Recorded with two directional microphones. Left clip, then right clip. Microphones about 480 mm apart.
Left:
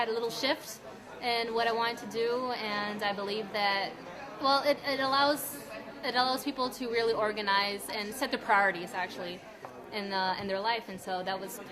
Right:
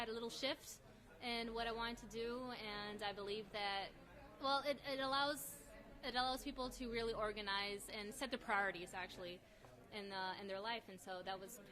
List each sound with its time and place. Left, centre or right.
0.0 s a woman's voice: right